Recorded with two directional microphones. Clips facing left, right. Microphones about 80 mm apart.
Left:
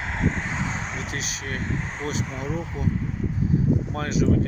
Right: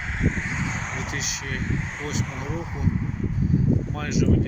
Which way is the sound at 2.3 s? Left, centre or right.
Centre.